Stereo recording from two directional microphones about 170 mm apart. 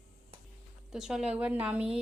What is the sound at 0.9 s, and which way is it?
A woman's voice, 5° right (ahead or behind).